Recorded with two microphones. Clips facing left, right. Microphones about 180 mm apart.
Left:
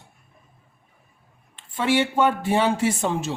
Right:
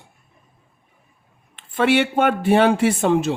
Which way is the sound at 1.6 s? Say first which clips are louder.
Right 4 dB; 65° right (ahead or behind).